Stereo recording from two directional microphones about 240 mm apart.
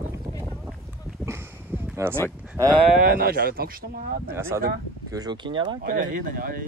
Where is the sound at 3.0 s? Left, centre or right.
Right.